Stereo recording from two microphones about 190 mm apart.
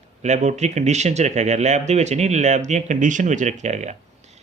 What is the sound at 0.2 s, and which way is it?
Speech, 35° right (ahead or behind).